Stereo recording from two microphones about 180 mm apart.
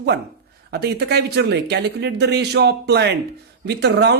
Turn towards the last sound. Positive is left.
turn(degrees=-70)  # may be behind; listen again after turning